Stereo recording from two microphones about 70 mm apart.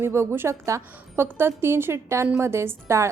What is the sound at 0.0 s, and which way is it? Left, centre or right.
A woman's voice, right.